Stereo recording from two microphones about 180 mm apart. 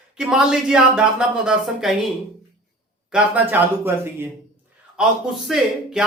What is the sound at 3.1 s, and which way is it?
A man's voice, 5° right (ahead or behind).